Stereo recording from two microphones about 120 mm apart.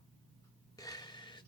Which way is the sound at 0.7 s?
30° left (ahead or behind).